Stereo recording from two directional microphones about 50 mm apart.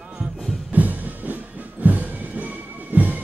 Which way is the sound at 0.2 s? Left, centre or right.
Right.